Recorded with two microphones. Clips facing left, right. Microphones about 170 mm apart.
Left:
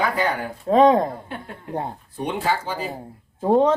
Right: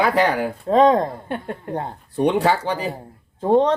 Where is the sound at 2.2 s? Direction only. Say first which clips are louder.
Right 7 dB; 70° right (ahead or behind).